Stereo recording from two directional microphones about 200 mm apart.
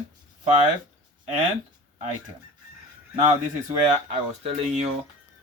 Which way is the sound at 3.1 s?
30° right (ahead or behind).